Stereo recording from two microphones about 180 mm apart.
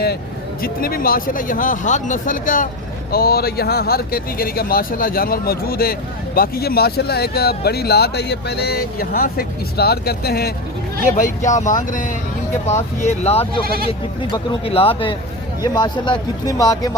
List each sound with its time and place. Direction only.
0.6 s speech: 55° left (ahead or behind)
11.0 s speech: 45° left (ahead or behind); by 16.9 s 20° left (ahead or behind)